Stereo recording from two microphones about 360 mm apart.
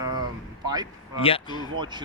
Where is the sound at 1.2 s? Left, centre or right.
Centre.